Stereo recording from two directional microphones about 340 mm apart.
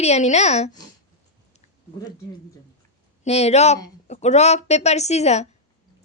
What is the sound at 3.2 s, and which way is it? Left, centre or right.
Speech, centre.